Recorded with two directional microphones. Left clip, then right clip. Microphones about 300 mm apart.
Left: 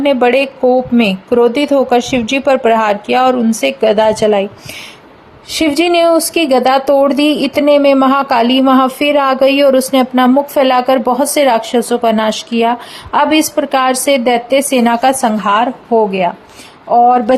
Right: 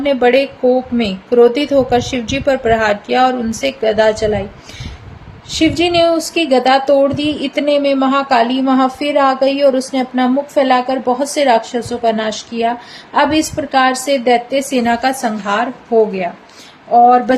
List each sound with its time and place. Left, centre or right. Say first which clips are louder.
0.0 s speech: left 1 dB; centre
5.5 s speech: left 2 dB; left